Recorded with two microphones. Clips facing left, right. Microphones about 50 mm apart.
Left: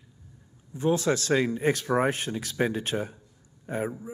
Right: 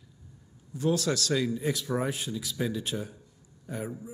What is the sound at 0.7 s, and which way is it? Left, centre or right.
A man's voice, left.